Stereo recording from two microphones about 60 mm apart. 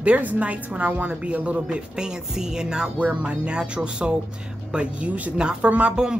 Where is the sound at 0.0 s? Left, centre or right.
Right.